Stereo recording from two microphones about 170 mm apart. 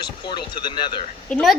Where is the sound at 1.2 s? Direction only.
5° left (ahead or behind).